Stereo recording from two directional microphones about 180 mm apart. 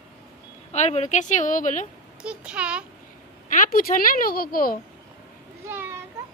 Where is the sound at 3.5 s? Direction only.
50° left (ahead or behind).